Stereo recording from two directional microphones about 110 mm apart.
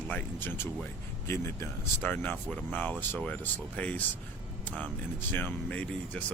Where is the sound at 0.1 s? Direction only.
15° left (ahead or behind).